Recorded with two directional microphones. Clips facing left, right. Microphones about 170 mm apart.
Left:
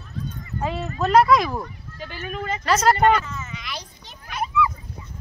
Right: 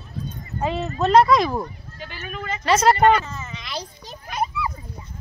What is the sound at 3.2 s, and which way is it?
Children playing, 30° right (ahead or behind).